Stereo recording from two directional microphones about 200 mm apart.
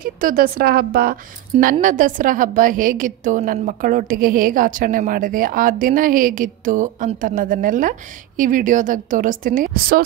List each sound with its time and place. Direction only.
0.0 s a woman's voice: 45° right (ahead or behind)